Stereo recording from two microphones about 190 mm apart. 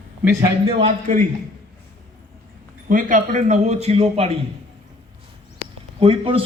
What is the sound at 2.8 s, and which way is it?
A man's voice, 45° right (ahead or behind).